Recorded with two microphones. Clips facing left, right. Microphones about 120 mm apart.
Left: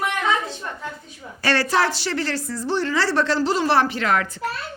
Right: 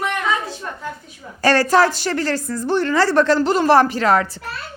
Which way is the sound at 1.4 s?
45° right (ahead or behind).